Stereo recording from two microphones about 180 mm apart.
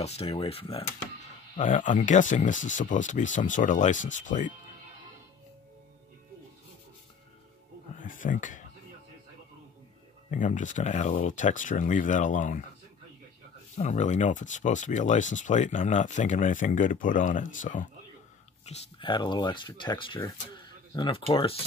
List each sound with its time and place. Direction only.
0.0 s speech: 35° left (ahead or behind)
1.6 s speech: 45° left (ahead or behind)
8.0 s a sound: 45° left (ahead or behind)
10.3 s speech: 45° left (ahead or behind)
13.7 s speech: 40° left (ahead or behind)
18.7 s speech: 30° left (ahead or behind)